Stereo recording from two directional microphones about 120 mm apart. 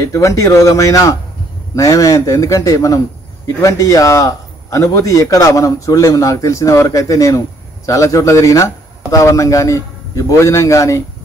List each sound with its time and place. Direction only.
0.0 s a man's voice: 25° left (ahead or behind)